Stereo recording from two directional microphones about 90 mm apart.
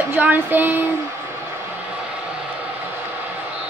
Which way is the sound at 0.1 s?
20° right (ahead or behind).